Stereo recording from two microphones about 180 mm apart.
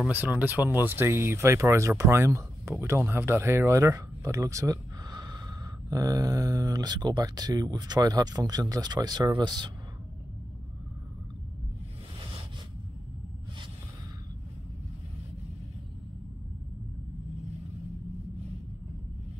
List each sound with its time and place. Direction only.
0.1 s speech: 10° right (ahead or behind); by 9.7 s 25° right (ahead or behind)